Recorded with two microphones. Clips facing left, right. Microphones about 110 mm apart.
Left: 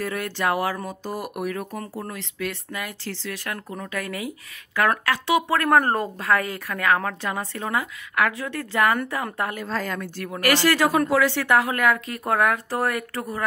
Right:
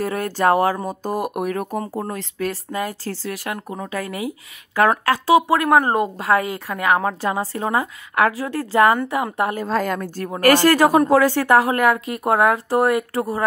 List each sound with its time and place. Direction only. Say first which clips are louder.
0.0 s a woman's voice: right 6 dB; 35° right (ahead or behind)
5.6 s speech: right 3 dB; 10° right (ahead or behind)
6.1 s a woman's voice: right 4 dB; 25° right (ahead or behind)
9.7 s a woman's voice: right 6 dB; 45° right (ahead or behind)